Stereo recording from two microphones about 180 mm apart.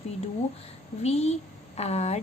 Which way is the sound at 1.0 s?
35° left (ahead or behind).